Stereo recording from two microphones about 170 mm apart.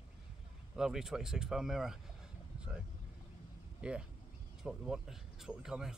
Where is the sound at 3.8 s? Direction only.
5° right (ahead or behind).